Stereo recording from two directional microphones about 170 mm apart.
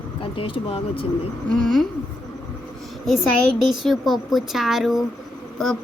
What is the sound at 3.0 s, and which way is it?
Speech, centre (ahead or behind).